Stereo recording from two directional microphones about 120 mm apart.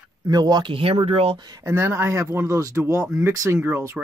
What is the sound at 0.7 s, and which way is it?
Speech, 55° right (ahead or behind).